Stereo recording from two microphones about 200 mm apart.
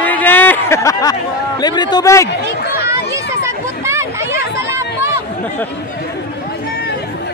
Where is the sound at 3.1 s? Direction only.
15° right (ahead or behind).